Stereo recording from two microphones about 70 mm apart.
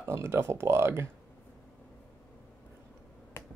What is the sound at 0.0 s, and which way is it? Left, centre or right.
Speech, right.